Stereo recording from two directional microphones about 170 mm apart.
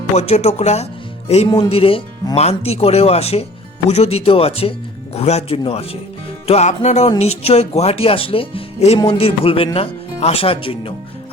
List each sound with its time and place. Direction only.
0.2 s speech: 40° left (ahead or behind)
1.5 s speech: 25° left (ahead or behind)